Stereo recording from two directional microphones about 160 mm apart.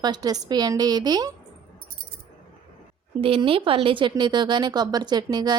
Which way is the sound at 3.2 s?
35° right (ahead or behind).